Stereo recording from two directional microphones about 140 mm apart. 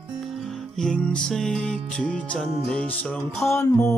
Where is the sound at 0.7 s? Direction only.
5° left (ahead or behind).